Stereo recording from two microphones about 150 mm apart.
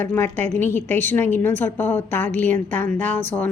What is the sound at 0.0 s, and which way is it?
A woman's voice, 15° left (ahead or behind).